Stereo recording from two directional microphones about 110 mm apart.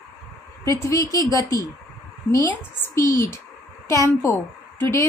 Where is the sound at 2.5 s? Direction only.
20° left (ahead or behind).